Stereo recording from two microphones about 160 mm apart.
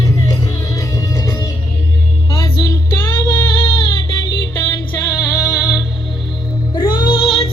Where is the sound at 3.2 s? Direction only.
25° left (ahead or behind).